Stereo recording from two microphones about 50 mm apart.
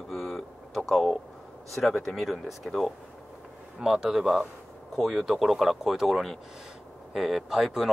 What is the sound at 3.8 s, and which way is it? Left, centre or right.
Speech, centre.